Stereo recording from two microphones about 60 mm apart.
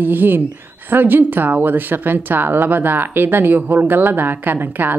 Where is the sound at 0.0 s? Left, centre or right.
Right.